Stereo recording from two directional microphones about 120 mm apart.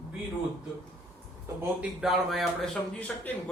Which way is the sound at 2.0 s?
Centre (ahead or behind).